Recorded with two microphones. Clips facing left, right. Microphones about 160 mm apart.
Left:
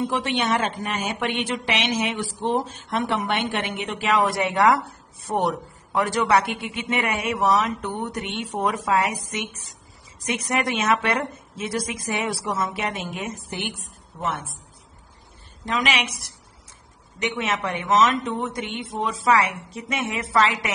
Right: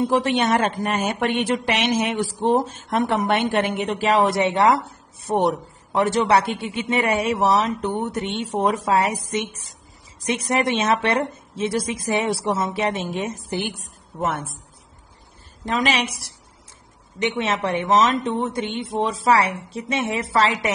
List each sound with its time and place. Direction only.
0.0 s a woman's voice: 40° right (ahead or behind)
14.2 s speech: 50° right (ahead or behind)
15.6 s a woman's voice: 35° right (ahead or behind)